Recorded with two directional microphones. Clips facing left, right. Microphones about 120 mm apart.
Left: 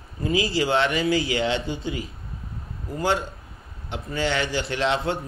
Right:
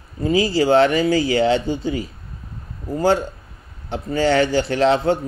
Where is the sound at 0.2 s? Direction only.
30° right (ahead or behind).